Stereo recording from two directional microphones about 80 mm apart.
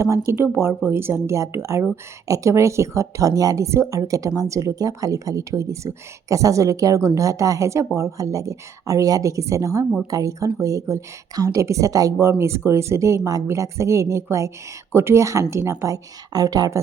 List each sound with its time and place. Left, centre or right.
0.0 s speech: right
12.2 s speech: right
16.3 s speech: right